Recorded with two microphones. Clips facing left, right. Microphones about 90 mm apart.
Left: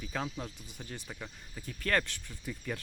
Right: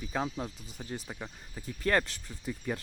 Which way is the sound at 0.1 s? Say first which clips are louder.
Right 4 dB; 15° right (ahead or behind).